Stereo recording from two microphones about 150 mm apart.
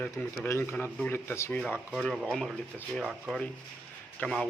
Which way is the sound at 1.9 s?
Centre (ahead or behind).